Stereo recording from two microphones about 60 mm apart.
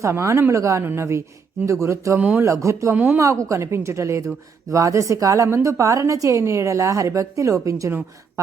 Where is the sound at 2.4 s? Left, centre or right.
Right.